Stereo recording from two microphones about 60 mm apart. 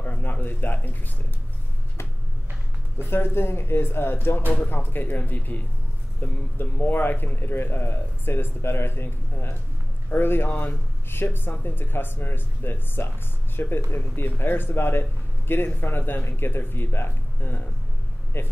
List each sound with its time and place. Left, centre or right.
0.0 s speech: left
3.0 s speech: left
4.5 s speech: left